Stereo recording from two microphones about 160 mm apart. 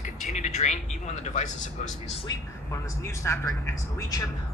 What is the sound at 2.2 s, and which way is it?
Speech, 20° left (ahead or behind).